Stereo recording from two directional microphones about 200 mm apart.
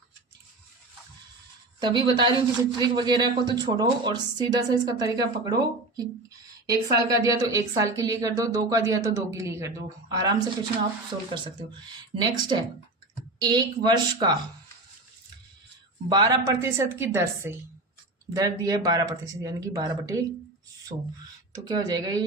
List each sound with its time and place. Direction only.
1.8 s speech: 25° right (ahead or behind)
6.7 s speech: 15° right (ahead or behind)
12.1 s speech: 20° right (ahead or behind)
16.0 s speech: 20° right (ahead or behind)
21.5 s speech: 20° right (ahead or behind)